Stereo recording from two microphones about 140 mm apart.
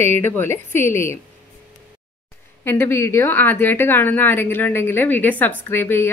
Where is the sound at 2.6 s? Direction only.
15° left (ahead or behind).